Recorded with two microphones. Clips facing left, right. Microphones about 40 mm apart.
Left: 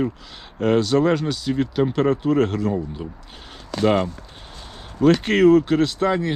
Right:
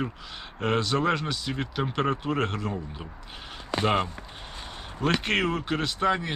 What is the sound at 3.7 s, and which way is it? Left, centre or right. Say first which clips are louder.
Speech: left 6 dB; right.